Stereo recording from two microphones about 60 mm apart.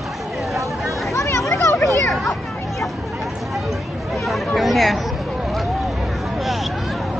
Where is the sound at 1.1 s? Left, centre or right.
Left.